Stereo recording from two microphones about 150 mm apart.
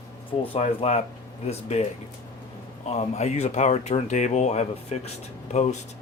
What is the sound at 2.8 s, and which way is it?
Speech, 45° left (ahead or behind).